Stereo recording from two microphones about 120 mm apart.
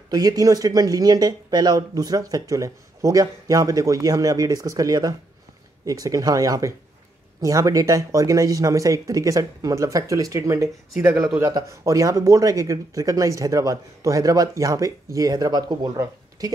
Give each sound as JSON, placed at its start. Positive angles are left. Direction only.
{"t": 0.1, "sound": "speech", "side_deg": -30}